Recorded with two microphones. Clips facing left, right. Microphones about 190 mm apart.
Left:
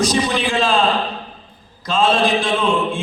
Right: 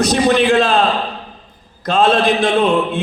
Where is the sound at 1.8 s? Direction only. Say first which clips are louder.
Right 3 dB; 60° right (ahead or behind).